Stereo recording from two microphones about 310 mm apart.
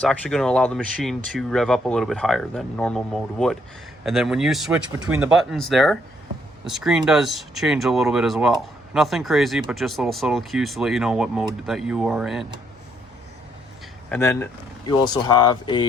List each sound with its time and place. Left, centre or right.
0.0 s speech: centre
14.1 s speech: centre